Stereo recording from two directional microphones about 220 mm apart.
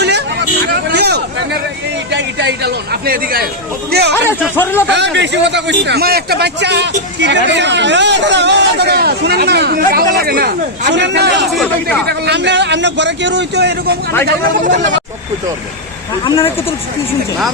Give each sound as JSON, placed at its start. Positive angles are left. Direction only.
{"t": 0.7, "sound": "vehicle", "side_deg": -50}
{"t": 2.0, "sound": "a man's voice", "side_deg": -50}
{"t": 4.3, "sound": "speech", "side_deg": 10}
{"t": 4.9, "sound": "a man's voice", "side_deg": -50}
{"t": 11.5, "sound": "speech", "side_deg": 5}
{"t": 12.0, "sound": "a man's voice", "side_deg": -50}
{"t": 14.3, "sound": "speech", "side_deg": -40}
{"t": 16.2, "sound": "speech", "side_deg": 25}